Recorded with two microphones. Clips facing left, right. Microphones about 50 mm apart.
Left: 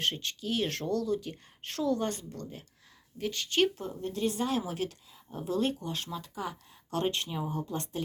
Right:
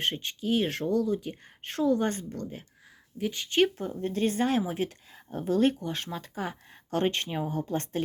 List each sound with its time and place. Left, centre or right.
0.0 s speech: centre
3.2 s speech: centre; by 4.6 s right
4.6 s speech: right
5.1 s speech: right